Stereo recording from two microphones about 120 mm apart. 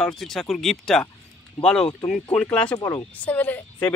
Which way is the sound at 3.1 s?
10° left (ahead or behind).